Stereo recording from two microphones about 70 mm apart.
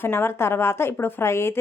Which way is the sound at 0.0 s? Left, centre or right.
Left.